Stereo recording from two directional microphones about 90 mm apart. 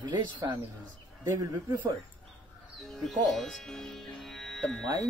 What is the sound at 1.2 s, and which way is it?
Speech, 45° right (ahead or behind).